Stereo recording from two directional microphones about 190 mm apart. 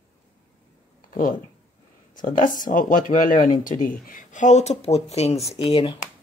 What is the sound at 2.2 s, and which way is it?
Speech, 45° left (ahead or behind).